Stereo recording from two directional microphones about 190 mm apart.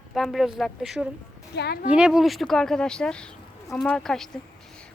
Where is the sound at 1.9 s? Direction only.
5° right (ahead or behind).